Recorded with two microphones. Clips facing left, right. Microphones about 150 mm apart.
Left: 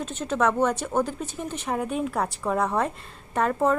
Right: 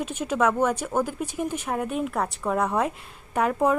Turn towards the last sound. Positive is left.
turn(degrees=-5)  # may be behind; listen again after turning